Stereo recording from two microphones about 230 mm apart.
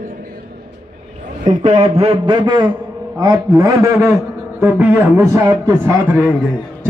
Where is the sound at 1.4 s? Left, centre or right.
Right; by 6.2 s centre.